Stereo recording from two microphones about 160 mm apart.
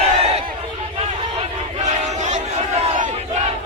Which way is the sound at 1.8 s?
45° right (ahead or behind).